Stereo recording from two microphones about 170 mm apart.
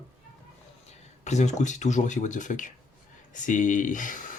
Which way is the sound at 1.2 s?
45° left (ahead or behind).